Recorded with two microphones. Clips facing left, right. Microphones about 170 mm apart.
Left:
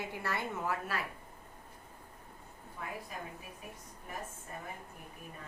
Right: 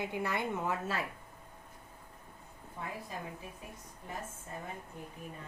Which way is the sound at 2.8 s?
30° right (ahead or behind).